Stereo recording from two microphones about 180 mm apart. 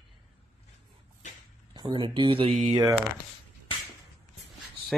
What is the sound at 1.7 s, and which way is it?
Speech, 25° right (ahead or behind).